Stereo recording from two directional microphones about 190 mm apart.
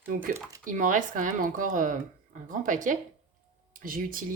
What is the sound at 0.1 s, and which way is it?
A woman's voice, 45° right (ahead or behind).